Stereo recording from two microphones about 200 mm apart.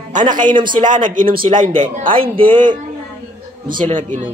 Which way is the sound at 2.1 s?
25° right (ahead or behind).